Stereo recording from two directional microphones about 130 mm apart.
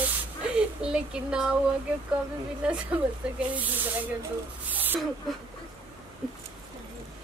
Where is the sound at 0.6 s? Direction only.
5° right (ahead or behind).